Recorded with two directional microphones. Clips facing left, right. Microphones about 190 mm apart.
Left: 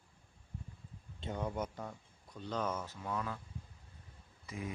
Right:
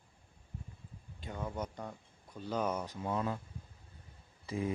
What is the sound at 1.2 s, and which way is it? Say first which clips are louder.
Speech: left 2 dB; 20° left (ahead or behind).